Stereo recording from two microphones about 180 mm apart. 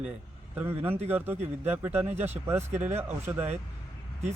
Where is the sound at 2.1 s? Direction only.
40° right (ahead or behind).